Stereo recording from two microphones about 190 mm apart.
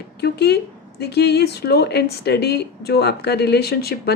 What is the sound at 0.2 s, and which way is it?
Speech, 60° left (ahead or behind).